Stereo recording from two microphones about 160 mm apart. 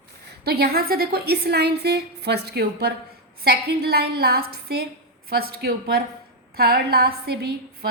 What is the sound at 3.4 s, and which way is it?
A woman's voice, 75° right (ahead or behind).